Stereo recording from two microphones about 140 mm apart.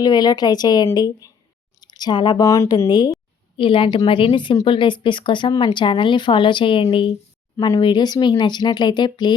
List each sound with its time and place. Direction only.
0.0 s speech: 30° left (ahead or behind)
2.5 s a woman's voice: 20° left (ahead or behind)